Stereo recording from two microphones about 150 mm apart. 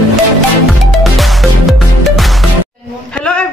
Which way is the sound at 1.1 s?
Centre (ahead or behind).